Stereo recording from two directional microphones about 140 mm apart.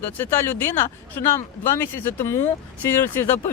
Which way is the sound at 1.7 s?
15° left (ahead or behind).